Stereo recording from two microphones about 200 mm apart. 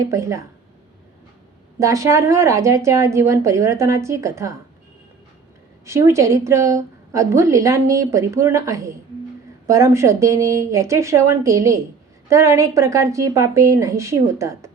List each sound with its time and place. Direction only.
0.0 s a woman's voice: 15° right (ahead or behind)
1.8 s a woman's voice: 15° right (ahead or behind)
5.8 s a woman's voice: 15° right (ahead or behind)